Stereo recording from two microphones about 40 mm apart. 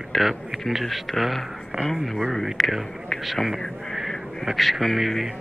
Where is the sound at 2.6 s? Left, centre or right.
Centre.